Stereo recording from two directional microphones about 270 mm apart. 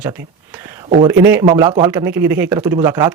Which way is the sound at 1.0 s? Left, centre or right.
Centre.